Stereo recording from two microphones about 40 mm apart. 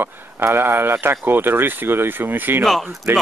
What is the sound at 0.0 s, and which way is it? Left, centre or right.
Speech, right.